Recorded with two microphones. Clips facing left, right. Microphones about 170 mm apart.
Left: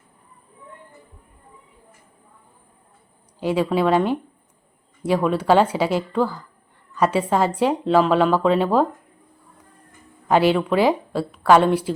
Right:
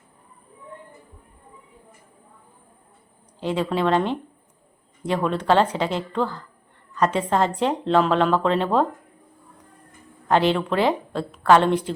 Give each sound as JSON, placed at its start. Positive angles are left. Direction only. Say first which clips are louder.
{"t": 3.4, "sound": "a woman's voice", "louder": "left 3 dB", "side_deg": 10}
{"t": 10.2, "sound": "a woman's voice", "louder": "left 2 dB", "side_deg": 10}